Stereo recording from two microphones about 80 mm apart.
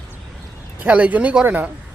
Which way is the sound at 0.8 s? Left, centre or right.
Centre.